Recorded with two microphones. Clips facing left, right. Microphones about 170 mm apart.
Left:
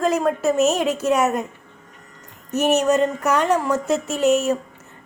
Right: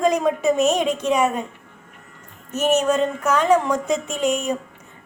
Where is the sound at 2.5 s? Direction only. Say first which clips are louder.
Left 1 dB; 10° left (ahead or behind).